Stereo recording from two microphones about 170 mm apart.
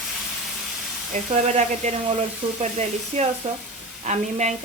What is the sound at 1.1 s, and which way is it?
Speech, 40° right (ahead or behind).